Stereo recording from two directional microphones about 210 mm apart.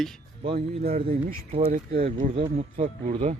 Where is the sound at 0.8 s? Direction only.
45° right (ahead or behind); by 3.3 s 25° right (ahead or behind).